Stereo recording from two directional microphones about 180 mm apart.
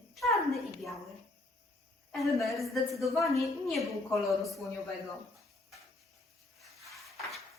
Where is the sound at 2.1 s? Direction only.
Centre (ahead or behind).